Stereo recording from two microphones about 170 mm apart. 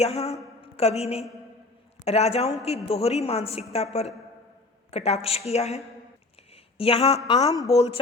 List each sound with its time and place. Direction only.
0.0 s a woman's voice: 40° left (ahead or behind)
4.9 s a woman's voice: 40° left (ahead or behind)
7.3 s speech: 20° left (ahead or behind)
7.7 s a woman's voice: 30° left (ahead or behind)